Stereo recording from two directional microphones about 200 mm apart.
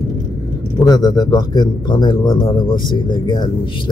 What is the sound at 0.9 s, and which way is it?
Speech, 20° left (ahead or behind).